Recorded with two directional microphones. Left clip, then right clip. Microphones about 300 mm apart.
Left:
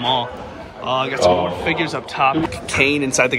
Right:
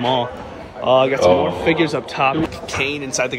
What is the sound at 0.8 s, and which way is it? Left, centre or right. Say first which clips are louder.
Speech: right 3 dB; centre.